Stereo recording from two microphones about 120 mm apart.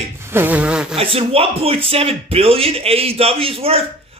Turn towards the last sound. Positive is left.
turn(degrees=-55)  # may be behind; listen again after turning